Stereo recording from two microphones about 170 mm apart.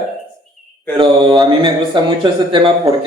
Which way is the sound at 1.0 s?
25° right (ahead or behind).